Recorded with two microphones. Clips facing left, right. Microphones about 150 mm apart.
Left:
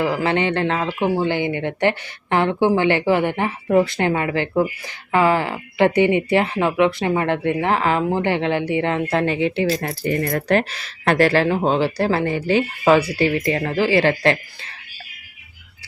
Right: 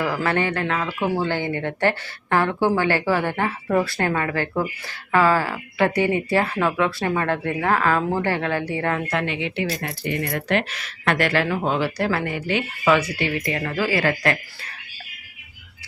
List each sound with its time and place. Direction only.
0.0 s speech: 20° left (ahead or behind)